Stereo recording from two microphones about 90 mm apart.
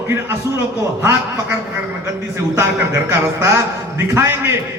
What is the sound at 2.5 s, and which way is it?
A man's voice, 30° right (ahead or behind).